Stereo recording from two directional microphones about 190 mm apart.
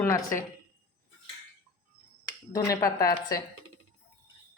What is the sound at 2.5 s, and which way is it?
Speech, 15° left (ahead or behind).